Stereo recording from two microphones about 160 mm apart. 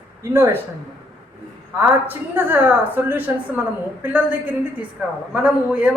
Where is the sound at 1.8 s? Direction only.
15° right (ahead or behind).